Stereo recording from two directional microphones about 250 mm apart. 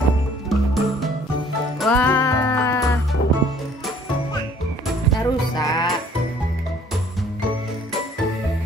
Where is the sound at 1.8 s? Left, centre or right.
Centre.